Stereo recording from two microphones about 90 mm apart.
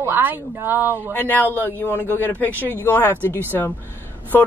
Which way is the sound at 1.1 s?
20° left (ahead or behind).